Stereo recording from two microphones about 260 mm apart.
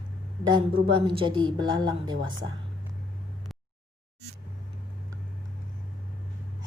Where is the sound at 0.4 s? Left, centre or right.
Centre.